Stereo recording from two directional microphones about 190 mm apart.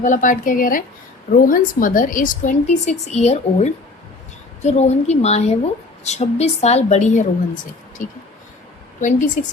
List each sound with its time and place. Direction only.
0.0 s a woman's voice: 45° left (ahead or behind)